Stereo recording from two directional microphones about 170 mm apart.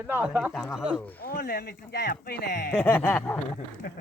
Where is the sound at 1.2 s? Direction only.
65° left (ahead or behind).